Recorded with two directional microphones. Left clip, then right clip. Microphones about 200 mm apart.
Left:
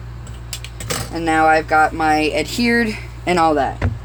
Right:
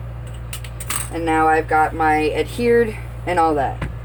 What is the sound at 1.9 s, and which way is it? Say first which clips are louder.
Speech: left 1 dB; 50° left (ahead or behind).